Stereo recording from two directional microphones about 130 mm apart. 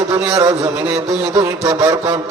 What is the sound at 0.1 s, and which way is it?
Speech, 25° right (ahead or behind).